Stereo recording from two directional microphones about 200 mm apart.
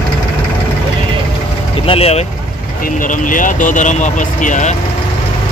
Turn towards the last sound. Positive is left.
turn(degrees=40)  # may be behind; listen again after turning